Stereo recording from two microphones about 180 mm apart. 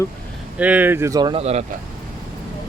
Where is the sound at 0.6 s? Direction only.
10° right (ahead or behind).